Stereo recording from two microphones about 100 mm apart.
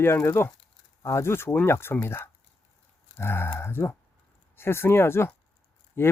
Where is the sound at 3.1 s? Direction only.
25° left (ahead or behind).